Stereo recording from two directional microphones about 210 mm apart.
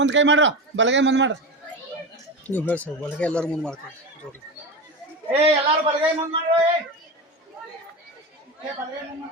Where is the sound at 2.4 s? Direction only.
10° left (ahead or behind).